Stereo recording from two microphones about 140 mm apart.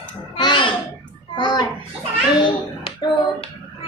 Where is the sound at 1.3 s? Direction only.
35° left (ahead or behind).